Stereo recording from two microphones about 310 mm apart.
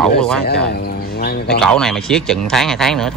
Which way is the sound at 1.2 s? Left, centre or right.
Left.